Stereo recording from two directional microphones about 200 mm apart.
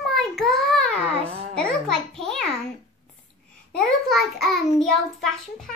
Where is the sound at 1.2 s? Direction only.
30° right (ahead or behind).